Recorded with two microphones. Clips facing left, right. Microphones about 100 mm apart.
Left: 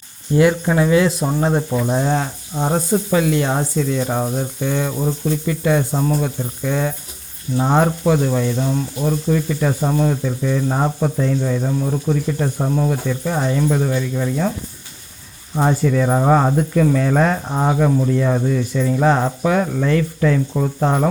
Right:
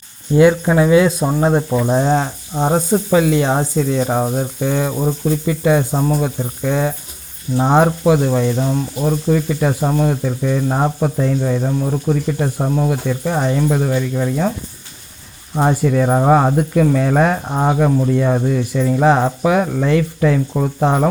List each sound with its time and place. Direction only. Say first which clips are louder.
0.3 s speech: right 3 dB; 20° right (ahead or behind)
15.5 s speech: right 2 dB; 15° right (ahead or behind)